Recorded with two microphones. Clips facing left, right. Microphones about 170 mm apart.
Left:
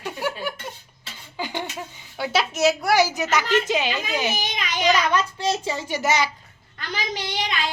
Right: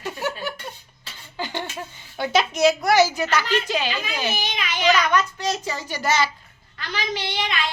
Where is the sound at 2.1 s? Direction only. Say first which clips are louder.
Right 2 dB; 5° left (ahead or behind); by 4.0 s 20° left (ahead or behind).